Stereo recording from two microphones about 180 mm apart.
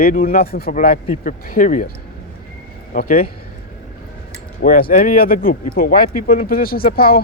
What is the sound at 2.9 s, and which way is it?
Speech, 50° left (ahead or behind).